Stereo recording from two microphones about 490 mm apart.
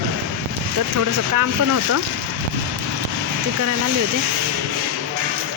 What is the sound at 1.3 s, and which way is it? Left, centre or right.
Speech, right.